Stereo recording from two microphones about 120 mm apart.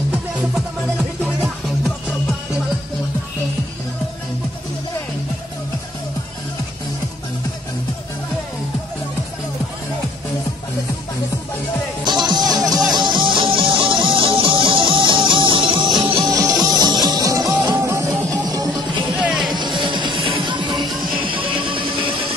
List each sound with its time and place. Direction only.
0.6 s music: centre (ahead or behind)
12.0 s music: 35° right (ahead or behind)
19.1 s music: 5° right (ahead or behind)
19.5 s music: 40° right (ahead or behind)